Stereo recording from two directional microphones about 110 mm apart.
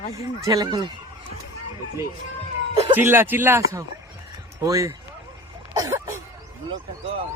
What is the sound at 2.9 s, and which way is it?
Speech, 20° right (ahead or behind).